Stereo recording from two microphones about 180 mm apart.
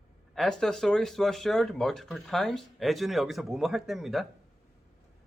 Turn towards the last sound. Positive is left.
turn(degrees=0)  # may be behind; listen again after turning